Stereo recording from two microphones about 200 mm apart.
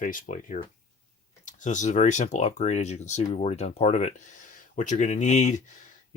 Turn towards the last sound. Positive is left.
turn(degrees=35)  # may be behind; listen again after turning